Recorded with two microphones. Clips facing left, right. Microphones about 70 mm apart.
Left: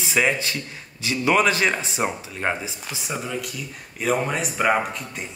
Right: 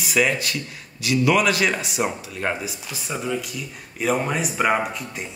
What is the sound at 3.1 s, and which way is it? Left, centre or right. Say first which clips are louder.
Speech: right 3 dB; centre.